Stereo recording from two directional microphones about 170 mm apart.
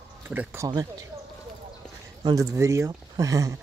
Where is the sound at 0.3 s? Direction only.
10° right (ahead or behind).